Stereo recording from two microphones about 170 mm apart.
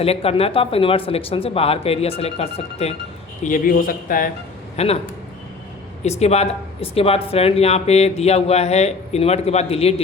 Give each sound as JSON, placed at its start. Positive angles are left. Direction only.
{"t": 0.0, "sound": "speech", "side_deg": 35}
{"t": 3.4, "sound": "a man's voice", "side_deg": 55}
{"t": 4.8, "sound": "speech", "side_deg": 40}
{"t": 6.0, "sound": "speech", "side_deg": 40}